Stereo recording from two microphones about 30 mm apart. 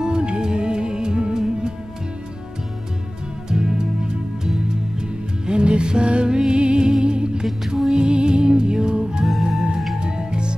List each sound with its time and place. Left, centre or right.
0.0 s music: right
3.4 s music: right
5.5 s music: right
7.4 s music: centre
7.9 s music: right